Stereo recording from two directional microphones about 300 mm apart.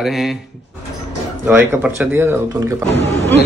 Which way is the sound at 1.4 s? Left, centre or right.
Centre.